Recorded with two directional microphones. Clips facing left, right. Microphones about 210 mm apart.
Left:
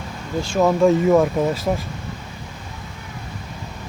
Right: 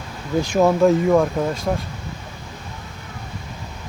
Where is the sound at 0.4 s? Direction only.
15° right (ahead or behind).